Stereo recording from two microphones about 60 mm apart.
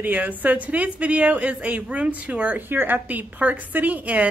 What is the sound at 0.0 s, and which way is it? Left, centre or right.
A woman's voice, right.